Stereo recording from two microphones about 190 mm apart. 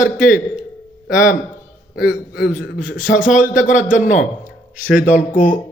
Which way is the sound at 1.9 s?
5° right (ahead or behind).